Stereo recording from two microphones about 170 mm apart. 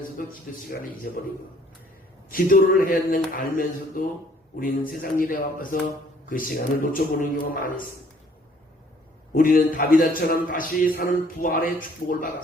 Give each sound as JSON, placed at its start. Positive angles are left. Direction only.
{"t": 1.1, "sound": "speech", "side_deg": 55}
{"t": 2.3, "sound": "a man's voice", "side_deg": 55}
{"t": 9.3, "sound": "speech", "side_deg": 55}